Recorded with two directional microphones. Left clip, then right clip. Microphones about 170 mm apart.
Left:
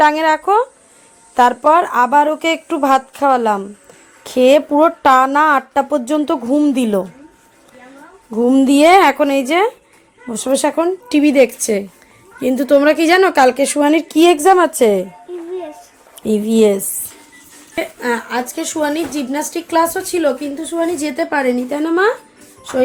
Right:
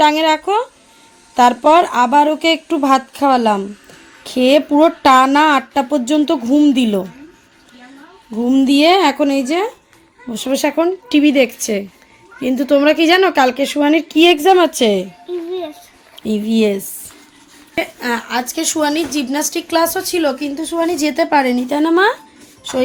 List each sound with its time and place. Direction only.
0.0 s speech: 10° left (ahead or behind)
8.3 s speech: 5° left (ahead or behind); by 9.7 s 30° left (ahead or behind)
10.2 s speech: centre (ahead or behind)
16.2 s speech: 10° left (ahead or behind)
17.7 s a woman's voice: 10° right (ahead or behind); by 22.1 s 40° right (ahead or behind)